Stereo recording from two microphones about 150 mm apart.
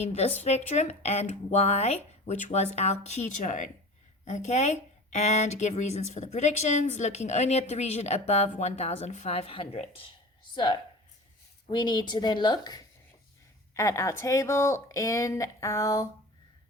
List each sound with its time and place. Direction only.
0.0 s speech: 45° left (ahead or behind); by 12.8 s 30° left (ahead or behind)
13.7 s speech: 20° left (ahead or behind)